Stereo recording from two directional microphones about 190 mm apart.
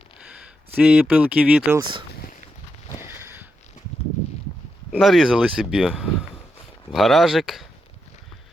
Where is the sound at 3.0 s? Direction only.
15° right (ahead or behind).